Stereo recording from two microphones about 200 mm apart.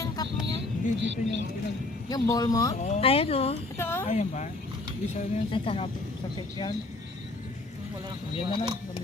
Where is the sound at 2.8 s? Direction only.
35° left (ahead or behind).